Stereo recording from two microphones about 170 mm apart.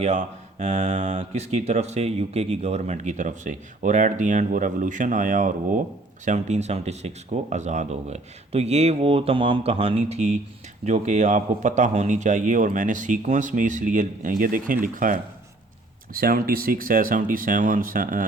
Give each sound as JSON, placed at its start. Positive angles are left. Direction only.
{"t": 0.0, "sound": "speech", "side_deg": -45}